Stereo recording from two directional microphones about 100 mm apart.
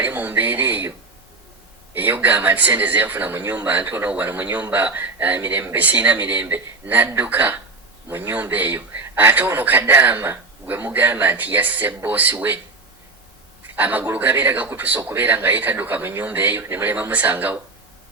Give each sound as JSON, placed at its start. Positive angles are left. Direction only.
{"t": 0.0, "sound": "a sound", "side_deg": -20}
{"t": 1.9, "sound": "speech", "side_deg": -20}
{"t": 13.7, "sound": "speech", "side_deg": -15}